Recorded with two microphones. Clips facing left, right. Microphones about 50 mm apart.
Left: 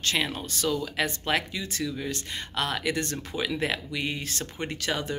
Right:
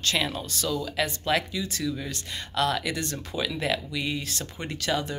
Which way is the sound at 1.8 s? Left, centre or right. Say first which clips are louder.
Even; centre.